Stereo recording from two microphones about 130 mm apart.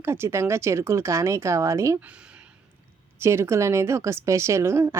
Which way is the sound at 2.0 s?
10° right (ahead or behind).